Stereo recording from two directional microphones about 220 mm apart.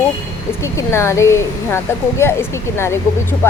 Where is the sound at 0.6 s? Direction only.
10° left (ahead or behind).